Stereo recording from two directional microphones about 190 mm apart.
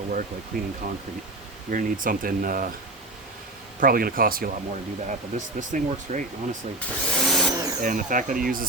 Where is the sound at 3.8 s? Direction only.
50° right (ahead or behind).